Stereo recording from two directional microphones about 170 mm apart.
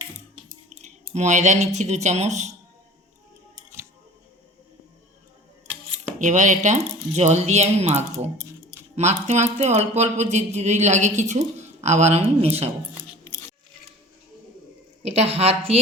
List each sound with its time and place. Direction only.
0.4 s speech: 45° right (ahead or behind)
6.1 s speech: 45° right (ahead or behind)
15.0 s speech: 40° right (ahead or behind)